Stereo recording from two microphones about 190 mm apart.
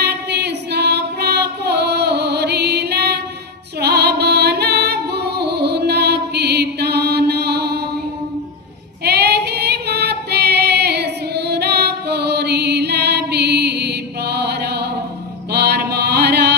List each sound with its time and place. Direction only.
0.0 s female singing: 60° right (ahead or behind)
3.8 s music: 60° right (ahead or behind)
9.0 s female singing: 60° right (ahead or behind)
15.5 s music: 60° right (ahead or behind)